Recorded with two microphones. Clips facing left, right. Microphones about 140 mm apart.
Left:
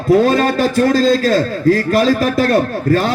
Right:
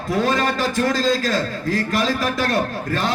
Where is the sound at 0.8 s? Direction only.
35° left (ahead or behind).